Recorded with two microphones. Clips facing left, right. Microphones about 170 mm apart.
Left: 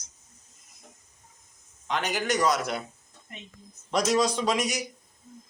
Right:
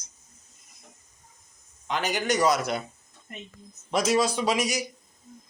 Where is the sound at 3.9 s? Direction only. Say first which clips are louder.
Even; 5° right (ahead or behind).